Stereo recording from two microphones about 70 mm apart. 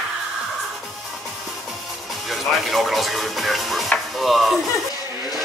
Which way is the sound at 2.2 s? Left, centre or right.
Centre.